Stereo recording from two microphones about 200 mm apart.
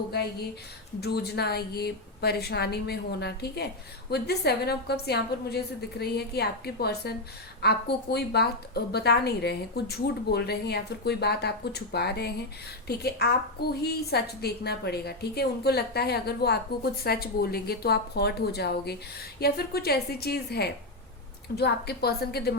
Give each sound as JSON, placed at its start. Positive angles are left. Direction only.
{"t": 1.0, "sound": "a woman's voice", "side_deg": 55}